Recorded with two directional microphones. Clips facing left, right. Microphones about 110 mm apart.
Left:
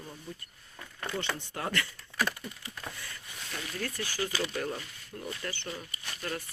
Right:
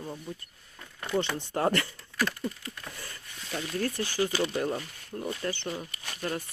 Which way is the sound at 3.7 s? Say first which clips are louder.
Right 6 dB; 30° right (ahead or behind).